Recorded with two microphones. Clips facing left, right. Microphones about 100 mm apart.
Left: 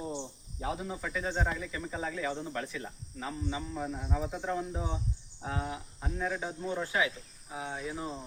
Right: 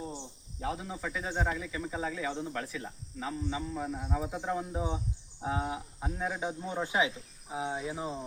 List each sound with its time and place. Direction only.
0.6 s speech: centre (ahead or behind); by 8.2 s 15° right (ahead or behind)